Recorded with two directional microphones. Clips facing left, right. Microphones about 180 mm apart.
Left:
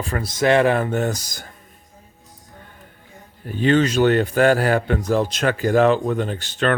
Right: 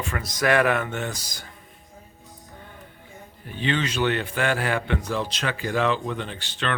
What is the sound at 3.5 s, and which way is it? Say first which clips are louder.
A man's voice: left 9 dB; 45° left (ahead or behind).